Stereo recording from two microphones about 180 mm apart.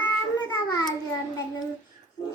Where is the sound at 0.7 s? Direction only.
20° left (ahead or behind).